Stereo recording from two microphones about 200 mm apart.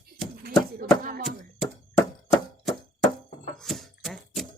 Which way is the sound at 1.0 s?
45° right (ahead or behind).